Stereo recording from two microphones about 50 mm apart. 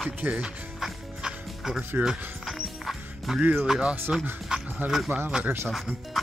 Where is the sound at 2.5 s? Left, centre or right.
Centre.